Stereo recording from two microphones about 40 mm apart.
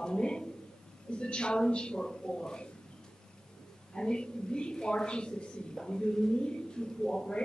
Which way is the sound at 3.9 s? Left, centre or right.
Left.